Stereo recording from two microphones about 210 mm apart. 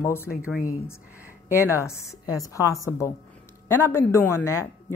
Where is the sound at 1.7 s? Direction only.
15° left (ahead or behind).